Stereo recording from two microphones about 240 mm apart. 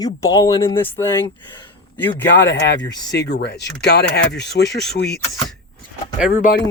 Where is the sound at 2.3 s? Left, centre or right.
Left.